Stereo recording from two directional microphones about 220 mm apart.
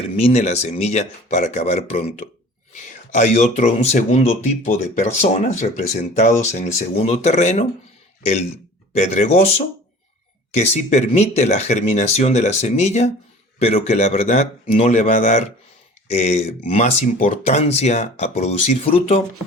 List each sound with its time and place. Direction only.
0.2 s speech: 30° left (ahead or behind)
9.0 s speech: 30° left (ahead or behind)